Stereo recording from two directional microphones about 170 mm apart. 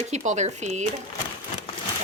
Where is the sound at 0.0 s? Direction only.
45° right (ahead or behind).